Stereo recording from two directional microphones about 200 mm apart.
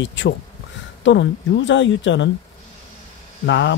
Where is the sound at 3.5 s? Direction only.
65° left (ahead or behind).